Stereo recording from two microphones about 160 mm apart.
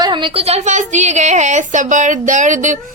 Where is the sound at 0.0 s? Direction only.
30° right (ahead or behind).